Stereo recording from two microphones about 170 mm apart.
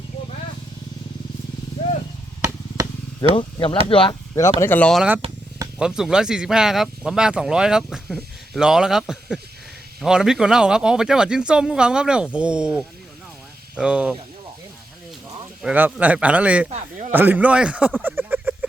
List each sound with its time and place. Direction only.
3.3 s speech: 30° left (ahead or behind)
4.6 s speech: 10° left (ahead or behind)
5.2 s speech: 35° right (ahead or behind)
5.8 s speech: 5° right (ahead or behind)
15.6 s speech: 10° right (ahead or behind)
16.6 s a sound: 45° right (ahead or behind)
17.1 s speech: 10° right (ahead or behind)
18.0 s a sound: 10° right (ahead or behind)